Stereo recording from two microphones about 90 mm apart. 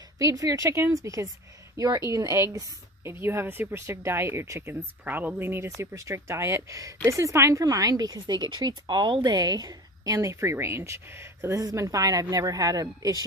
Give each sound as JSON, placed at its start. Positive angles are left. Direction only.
{"t": 0.2, "sound": "a woman's voice", "side_deg": -40}